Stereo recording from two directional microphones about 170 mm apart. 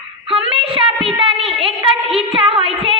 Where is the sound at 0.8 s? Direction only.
30° right (ahead or behind).